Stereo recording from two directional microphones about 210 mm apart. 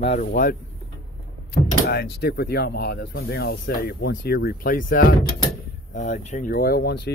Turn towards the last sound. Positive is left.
turn(degrees=50)  # may be behind; listen again after turning